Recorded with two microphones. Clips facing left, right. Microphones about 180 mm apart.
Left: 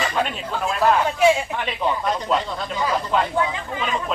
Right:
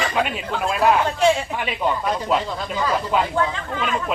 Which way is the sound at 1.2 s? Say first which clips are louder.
Left 1 dB; 5° left (ahead or behind).